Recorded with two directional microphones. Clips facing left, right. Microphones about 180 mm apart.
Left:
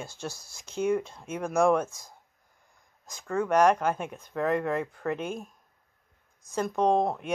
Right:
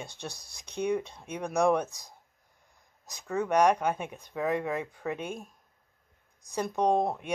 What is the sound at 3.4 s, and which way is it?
Speech, centre (ahead or behind).